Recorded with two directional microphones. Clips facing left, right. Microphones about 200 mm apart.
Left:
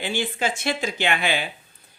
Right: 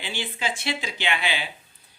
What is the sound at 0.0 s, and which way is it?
Speech, 50° left (ahead or behind).